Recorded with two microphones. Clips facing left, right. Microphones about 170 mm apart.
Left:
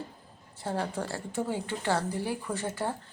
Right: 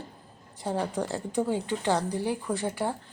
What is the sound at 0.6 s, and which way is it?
Speech, 15° right (ahead or behind).